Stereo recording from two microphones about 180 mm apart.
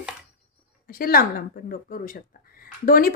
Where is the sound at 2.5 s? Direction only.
50° left (ahead or behind).